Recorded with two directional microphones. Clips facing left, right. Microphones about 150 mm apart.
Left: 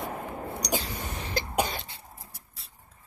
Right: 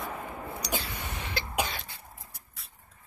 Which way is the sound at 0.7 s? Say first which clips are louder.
Left 3 dB; 40° left (ahead or behind).